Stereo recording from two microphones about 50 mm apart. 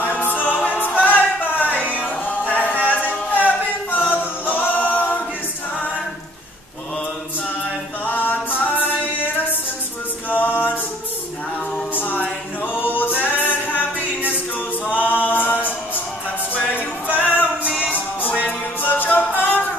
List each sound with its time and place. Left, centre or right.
0.0 s music: left
2.8 s a capella: left
8.0 s a capella: left
11.9 s a capella: left
12.7 s singing: left
13.2 s music: left
14.9 s a capella: left
16.6 s music: left